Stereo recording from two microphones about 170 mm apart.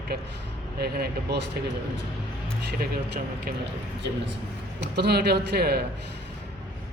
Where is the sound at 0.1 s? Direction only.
70° right (ahead or behind).